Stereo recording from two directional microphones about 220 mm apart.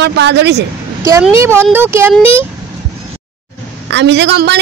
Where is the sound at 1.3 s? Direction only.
10° right (ahead or behind).